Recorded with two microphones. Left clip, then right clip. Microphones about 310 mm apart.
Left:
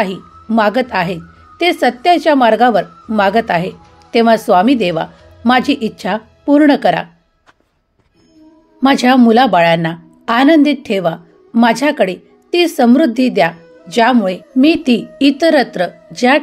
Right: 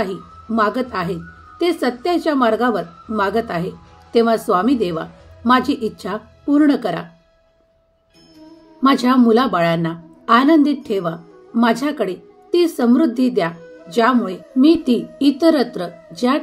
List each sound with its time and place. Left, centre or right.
0.0 s a woman's voice: centre
8.8 s a woman's voice: centre